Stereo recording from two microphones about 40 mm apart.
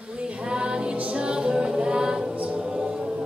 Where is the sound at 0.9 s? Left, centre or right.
Right.